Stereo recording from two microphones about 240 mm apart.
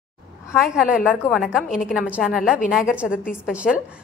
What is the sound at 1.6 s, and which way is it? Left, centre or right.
Speech, left.